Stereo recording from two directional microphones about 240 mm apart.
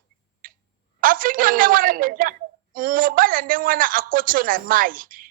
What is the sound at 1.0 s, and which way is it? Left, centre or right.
A man's voice, right.